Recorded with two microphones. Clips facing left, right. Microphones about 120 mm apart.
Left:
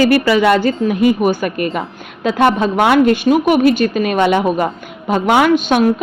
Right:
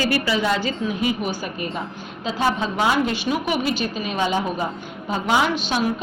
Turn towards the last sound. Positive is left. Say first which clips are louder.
# left 9 dB
turn(degrees=50)  # may be behind; listen again after turning